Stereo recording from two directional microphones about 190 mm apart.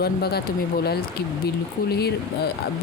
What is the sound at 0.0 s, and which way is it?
Speech, 55° left (ahead or behind).